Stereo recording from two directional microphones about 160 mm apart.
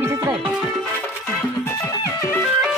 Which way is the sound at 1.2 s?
10° left (ahead or behind).